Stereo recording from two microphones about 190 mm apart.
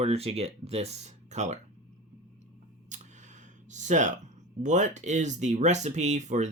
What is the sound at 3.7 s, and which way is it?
Speech, 40° right (ahead or behind).